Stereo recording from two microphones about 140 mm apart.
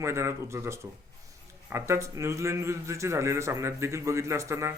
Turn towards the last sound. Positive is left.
turn(degrees=-20)  # may be behind; listen again after turning